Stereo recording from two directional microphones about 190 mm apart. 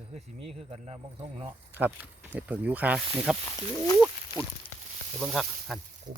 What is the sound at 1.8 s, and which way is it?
Speech, 10° right (ahead or behind).